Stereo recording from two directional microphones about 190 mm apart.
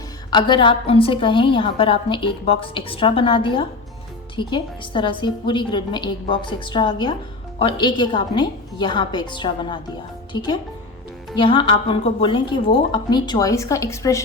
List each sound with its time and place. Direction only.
0.3 s a woman's voice: 25° left (ahead or behind)